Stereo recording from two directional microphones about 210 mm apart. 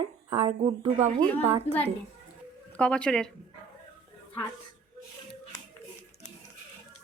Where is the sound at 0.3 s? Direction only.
30° right (ahead or behind).